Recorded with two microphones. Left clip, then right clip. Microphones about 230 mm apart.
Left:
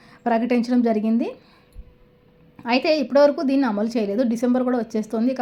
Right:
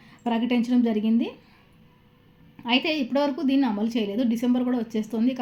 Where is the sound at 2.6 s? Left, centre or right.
Centre.